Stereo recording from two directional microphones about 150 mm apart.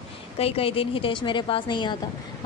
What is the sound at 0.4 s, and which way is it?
Speech, 40° left (ahead or behind).